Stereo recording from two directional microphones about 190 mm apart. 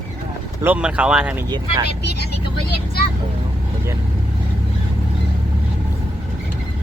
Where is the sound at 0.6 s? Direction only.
5° right (ahead or behind).